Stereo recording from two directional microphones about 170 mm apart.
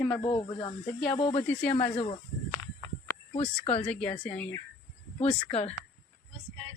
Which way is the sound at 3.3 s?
35° left (ahead or behind).